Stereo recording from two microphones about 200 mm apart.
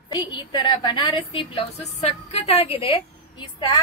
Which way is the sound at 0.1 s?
20° left (ahead or behind).